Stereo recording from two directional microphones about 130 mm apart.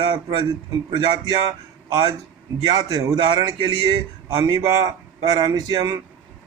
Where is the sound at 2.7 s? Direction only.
35° right (ahead or behind).